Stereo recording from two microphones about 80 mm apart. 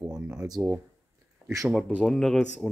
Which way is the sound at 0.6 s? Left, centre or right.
Right.